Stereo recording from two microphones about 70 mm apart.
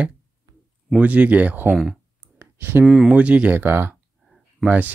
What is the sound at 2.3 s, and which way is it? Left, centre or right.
Clicking, right.